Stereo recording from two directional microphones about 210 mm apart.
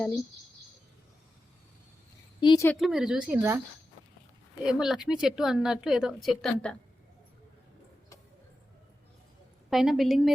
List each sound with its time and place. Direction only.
2.4 s speech: 20° left (ahead or behind)
2.6 s speech: centre (ahead or behind)
4.6 s speech: 5° right (ahead or behind)
9.6 s speech: centre (ahead or behind)